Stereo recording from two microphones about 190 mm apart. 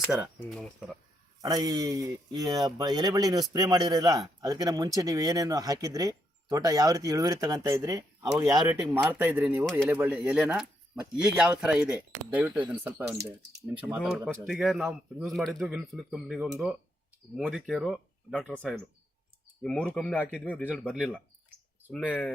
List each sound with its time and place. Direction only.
0.3 s a man's voice: centre (ahead or behind)
1.4 s a man's voice: 20° right (ahead or behind); by 18.8 s 5° left (ahead or behind)
19.9 s a man's voice: 5° left (ahead or behind)
20.9 s a man's voice: 5° right (ahead or behind)
21.9 s a man's voice: 10° left (ahead or behind)